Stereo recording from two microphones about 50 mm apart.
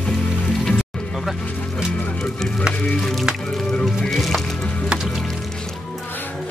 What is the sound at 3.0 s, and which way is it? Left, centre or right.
Music, centre.